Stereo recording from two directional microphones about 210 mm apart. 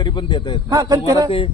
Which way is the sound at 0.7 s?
20° right (ahead or behind).